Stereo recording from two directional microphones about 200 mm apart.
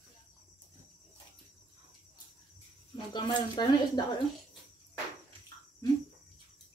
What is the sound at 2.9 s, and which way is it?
Speech, 20° left (ahead or behind).